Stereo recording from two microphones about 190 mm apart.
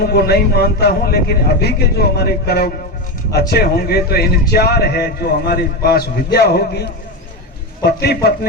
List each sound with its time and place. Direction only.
0.0 s a man's voice: 55° left (ahead or behind)